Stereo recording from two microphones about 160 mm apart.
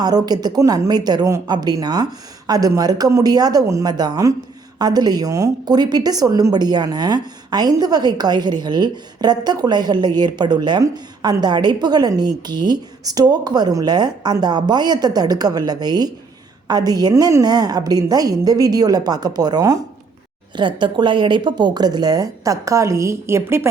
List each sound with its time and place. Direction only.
0.0 s a woman's voice: 25° right (ahead or behind)